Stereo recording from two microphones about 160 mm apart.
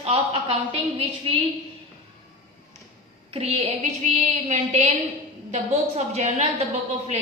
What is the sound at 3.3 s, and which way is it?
A woman's voice, 40° right (ahead or behind).